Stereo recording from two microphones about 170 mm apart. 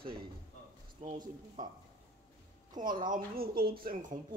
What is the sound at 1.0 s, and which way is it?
Speech, 40° right (ahead or behind).